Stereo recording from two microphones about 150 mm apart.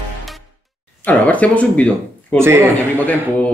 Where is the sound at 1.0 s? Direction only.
10° left (ahead or behind).